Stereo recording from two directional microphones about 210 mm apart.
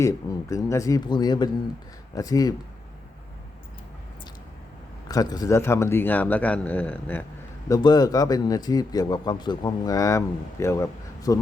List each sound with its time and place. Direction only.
0.0 s speech: 15° left (ahead or behind)
5.0 s speech: 20° left (ahead or behind)
7.7 s speech: 20° left (ahead or behind)